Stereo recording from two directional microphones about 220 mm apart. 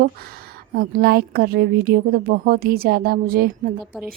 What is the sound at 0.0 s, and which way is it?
A woman's voice, 45° right (ahead or behind).